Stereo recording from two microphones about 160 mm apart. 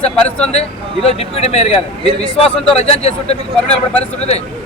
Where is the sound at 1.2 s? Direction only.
40° left (ahead or behind).